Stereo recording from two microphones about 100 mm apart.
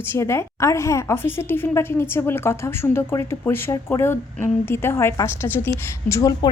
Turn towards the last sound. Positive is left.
turn(degrees=40)  # may be behind; listen again after turning